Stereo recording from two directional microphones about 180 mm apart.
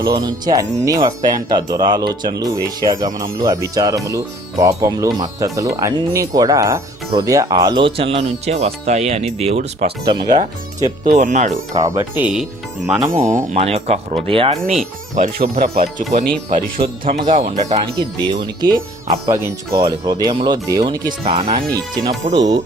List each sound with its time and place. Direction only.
0.0 s speech: 20° right (ahead or behind)
10.0 s speech: 25° right (ahead or behind)
11.2 s speech: 40° right (ahead or behind)
11.7 s speech: 20° right (ahead or behind)
12.1 s speech: 5° right (ahead or behind)
12.8 s speech: 15° right (ahead or behind)
13.1 s speech: 40° right (ahead or behind)
15.1 s speech: 50° right (ahead or behind)
17.1 s speech: 40° right (ahead or behind)
18.2 s speech: 25° right (ahead or behind)
21.2 s speech: 30° right (ahead or behind)